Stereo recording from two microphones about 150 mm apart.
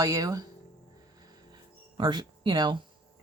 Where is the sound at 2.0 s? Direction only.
30° right (ahead or behind).